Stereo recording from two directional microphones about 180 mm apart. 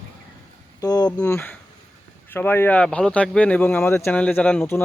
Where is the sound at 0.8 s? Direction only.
20° left (ahead or behind).